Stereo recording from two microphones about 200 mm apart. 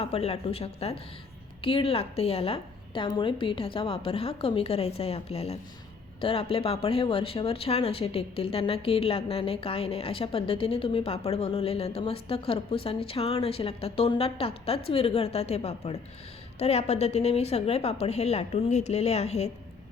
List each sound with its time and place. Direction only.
0.0 s a woman's voice: 30° left (ahead or behind)